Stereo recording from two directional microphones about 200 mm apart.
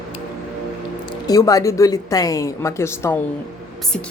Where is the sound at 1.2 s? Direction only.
15° left (ahead or behind).